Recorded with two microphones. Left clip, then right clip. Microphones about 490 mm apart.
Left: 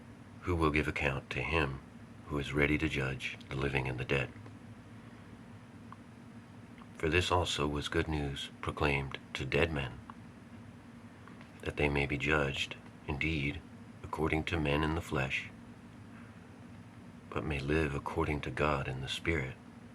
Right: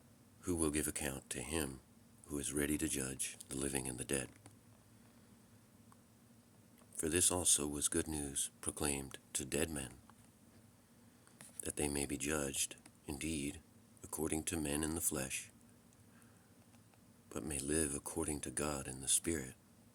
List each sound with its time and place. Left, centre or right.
0.4 s speech: right
6.9 s speech: right
11.6 s speech: right
17.3 s speech: right